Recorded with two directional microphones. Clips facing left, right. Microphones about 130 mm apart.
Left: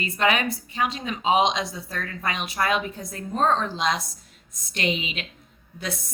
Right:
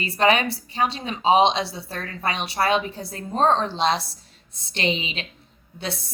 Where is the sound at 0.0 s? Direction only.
35° right (ahead or behind).